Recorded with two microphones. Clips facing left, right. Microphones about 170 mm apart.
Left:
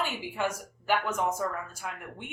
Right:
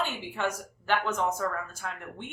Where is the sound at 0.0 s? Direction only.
10° left (ahead or behind).